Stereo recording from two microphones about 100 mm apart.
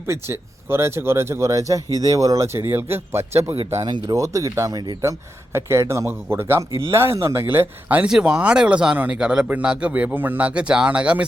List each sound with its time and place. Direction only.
0.1 s speech: 25° right (ahead or behind)
3.5 s speech: 90° right
4.1 s speech: 35° right (ahead or behind); by 11.3 s 10° right (ahead or behind)